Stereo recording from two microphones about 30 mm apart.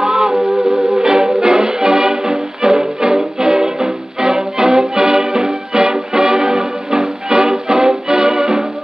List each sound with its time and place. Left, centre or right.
0.0 s music: centre
0.3 s music: centre
1.0 s music: centre